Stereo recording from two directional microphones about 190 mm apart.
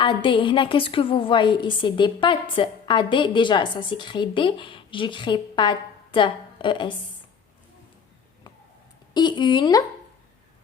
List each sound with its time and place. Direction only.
0.0 s a woman's voice: 25° left (ahead or behind)
9.1 s a woman's voice: 25° left (ahead or behind)